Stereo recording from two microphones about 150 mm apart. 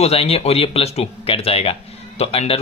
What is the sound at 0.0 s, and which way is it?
Speech, 40° left (ahead or behind).